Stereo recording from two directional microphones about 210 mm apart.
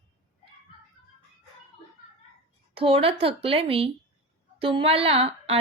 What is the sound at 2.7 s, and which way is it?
A woman's voice, 25° right (ahead or behind).